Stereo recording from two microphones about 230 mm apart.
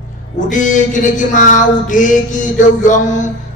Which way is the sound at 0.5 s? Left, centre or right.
Left.